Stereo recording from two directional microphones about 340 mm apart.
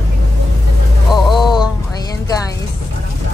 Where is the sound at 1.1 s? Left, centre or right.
Centre.